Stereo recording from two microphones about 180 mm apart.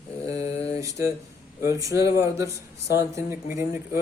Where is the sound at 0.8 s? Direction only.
15° right (ahead or behind).